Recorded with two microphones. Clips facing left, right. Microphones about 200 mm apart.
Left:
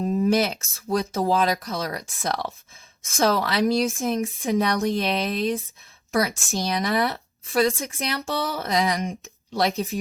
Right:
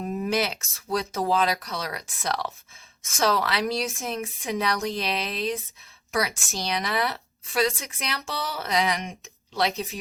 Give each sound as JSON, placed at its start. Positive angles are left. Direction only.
{"t": 0.3, "sound": "a woman's voice", "side_deg": 45}